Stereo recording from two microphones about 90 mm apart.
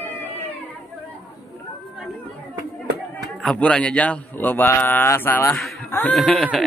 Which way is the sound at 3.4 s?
10° left (ahead or behind).